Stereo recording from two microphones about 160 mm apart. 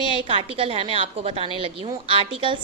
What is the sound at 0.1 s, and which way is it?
A woman's voice, 35° right (ahead or behind).